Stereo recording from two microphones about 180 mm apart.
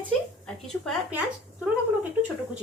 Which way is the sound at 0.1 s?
5° left (ahead or behind).